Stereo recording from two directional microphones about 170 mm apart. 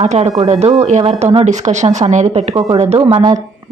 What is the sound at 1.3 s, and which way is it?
Speech, 40° right (ahead or behind).